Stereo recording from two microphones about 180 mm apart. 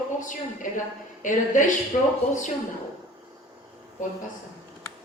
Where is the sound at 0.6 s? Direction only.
45° left (ahead or behind).